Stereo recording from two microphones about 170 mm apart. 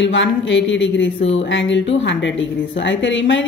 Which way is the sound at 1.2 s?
35° left (ahead or behind).